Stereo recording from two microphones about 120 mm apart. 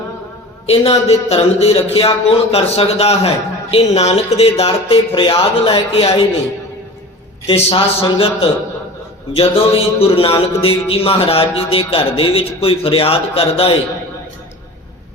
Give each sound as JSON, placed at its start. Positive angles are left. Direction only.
{"t": 0.7, "sound": "a man's voice", "side_deg": 55}
{"t": 7.4, "sound": "speech", "side_deg": 55}